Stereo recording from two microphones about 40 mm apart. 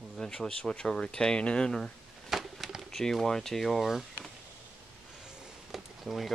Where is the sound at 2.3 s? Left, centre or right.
Centre.